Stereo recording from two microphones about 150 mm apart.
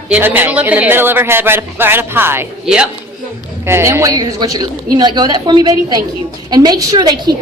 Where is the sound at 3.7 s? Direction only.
15° right (ahead or behind).